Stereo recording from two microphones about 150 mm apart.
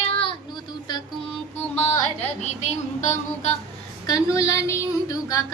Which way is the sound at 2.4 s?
50° left (ahead or behind).